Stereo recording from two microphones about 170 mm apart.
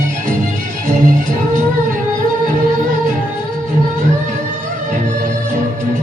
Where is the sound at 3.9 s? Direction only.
50° right (ahead or behind).